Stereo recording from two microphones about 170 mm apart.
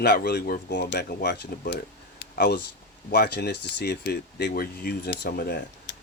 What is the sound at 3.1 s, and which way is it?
Speech, 70° left (ahead or behind).